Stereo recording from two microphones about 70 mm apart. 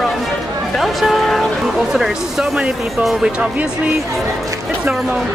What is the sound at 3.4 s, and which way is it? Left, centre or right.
Music, centre.